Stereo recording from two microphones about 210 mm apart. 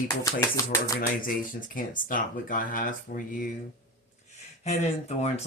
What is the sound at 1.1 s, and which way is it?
Speech, 40° left (ahead or behind).